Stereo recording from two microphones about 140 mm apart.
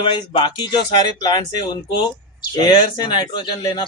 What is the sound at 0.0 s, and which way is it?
Speech, 35° left (ahead or behind).